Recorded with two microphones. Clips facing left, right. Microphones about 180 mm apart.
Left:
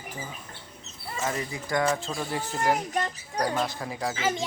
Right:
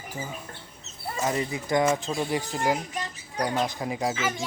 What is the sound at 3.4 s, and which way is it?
Speech, 20° right (ahead or behind).